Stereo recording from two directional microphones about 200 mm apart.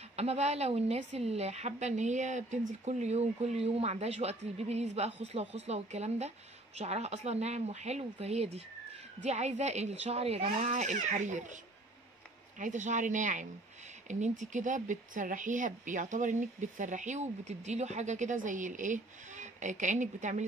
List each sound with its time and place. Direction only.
0.1 s speech: 30° right (ahead or behind)
12.5 s speech: 40° right (ahead or behind)